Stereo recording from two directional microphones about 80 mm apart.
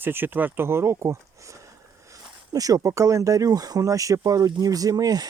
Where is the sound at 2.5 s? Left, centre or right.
Right.